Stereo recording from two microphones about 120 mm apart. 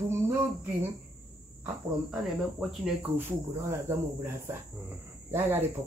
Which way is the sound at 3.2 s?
20° right (ahead or behind).